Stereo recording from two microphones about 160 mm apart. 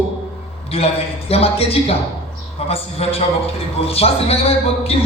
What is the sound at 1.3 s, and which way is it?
A man's voice, 40° left (ahead or behind).